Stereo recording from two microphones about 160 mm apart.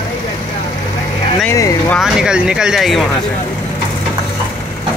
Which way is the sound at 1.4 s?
20° left (ahead or behind).